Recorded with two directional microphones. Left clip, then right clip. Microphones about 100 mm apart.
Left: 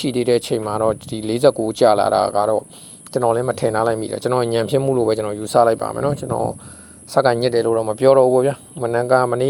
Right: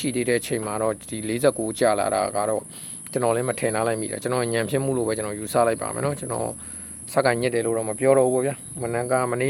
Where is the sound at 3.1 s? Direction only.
20° left (ahead or behind); by 4.8 s 45° left (ahead or behind).